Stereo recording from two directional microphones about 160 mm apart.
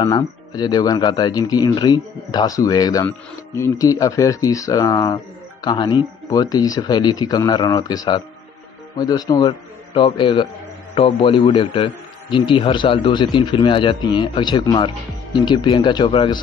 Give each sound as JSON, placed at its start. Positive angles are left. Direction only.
{"t": 0.0, "sound": "a man's voice", "side_deg": 25}